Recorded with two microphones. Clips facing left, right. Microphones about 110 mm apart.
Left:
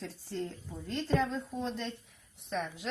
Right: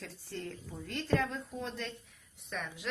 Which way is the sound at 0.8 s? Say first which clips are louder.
Left 1 dB; 25° left (ahead or behind).